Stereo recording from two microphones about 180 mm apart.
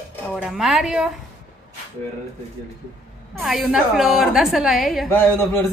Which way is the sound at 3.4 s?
Centre (ahead or behind).